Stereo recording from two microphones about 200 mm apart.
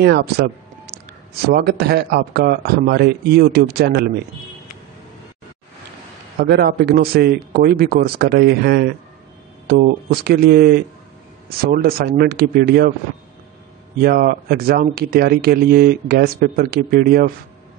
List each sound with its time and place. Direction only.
0.0 s speech: 55° right (ahead or behind)
6.4 s speech: 50° right (ahead or behind)
14.0 s speech: 50° right (ahead or behind)